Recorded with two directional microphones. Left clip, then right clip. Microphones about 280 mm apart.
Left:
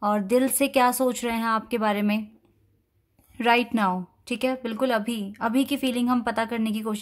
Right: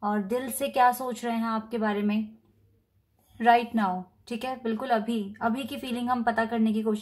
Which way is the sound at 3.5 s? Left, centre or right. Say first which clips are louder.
Even; left.